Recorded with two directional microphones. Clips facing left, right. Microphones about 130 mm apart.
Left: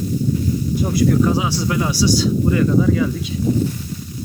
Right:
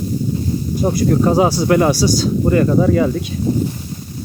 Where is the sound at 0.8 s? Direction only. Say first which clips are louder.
Right 2 dB; 40° right (ahead or behind).